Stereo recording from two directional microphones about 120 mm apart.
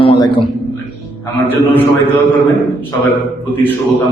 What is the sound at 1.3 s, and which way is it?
Speech, 15° left (ahead or behind).